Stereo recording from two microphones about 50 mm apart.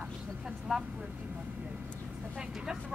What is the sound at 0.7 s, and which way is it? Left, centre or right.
Speech, centre.